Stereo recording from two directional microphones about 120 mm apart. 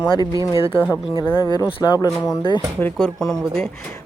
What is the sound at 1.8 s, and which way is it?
Speech, 35° left (ahead or behind).